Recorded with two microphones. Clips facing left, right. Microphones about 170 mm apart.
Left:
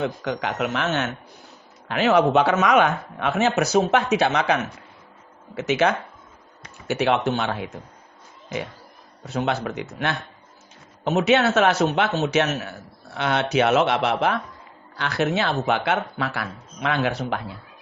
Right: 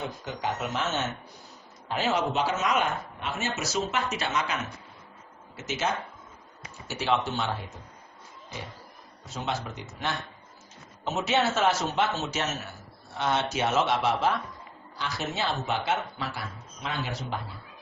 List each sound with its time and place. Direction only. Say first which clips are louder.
0.0 s speech: left 7 dB; 75° left (ahead or behind)
9.2 s speech: left 8 dB; 65° left (ahead or behind)